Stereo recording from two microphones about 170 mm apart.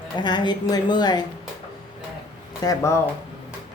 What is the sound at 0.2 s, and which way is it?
Speech, 25° left (ahead or behind).